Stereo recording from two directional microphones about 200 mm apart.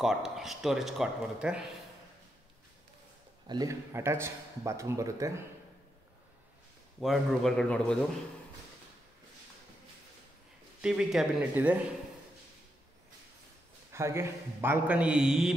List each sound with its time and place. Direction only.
0.0 s speech: centre (ahead or behind)
3.4 s speech: 20° right (ahead or behind)
7.0 s speech: centre (ahead or behind)
10.8 s speech: 5° right (ahead or behind)
13.9 s speech: 15° right (ahead or behind)